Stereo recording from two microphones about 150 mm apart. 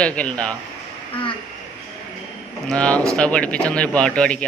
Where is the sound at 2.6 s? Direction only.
5° left (ahead or behind).